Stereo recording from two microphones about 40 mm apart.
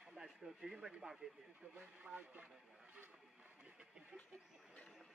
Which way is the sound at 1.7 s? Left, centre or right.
Right.